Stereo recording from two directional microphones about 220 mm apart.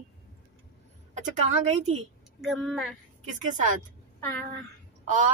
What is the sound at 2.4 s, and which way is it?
Speech, centre (ahead or behind).